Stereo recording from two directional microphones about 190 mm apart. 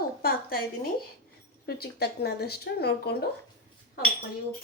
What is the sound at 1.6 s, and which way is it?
Speech, 55° left (ahead or behind).